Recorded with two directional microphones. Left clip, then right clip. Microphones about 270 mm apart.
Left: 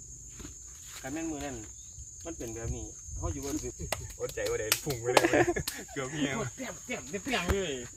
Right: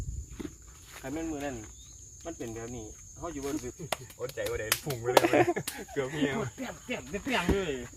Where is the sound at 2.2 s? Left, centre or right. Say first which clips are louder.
Right 1 dB; centre.